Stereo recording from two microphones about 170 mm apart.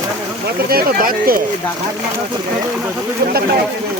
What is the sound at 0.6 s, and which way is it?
Speech, 65° right (ahead or behind).